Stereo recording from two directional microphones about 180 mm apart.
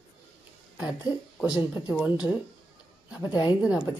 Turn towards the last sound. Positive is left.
turn(degrees=-5)  # may be behind; listen again after turning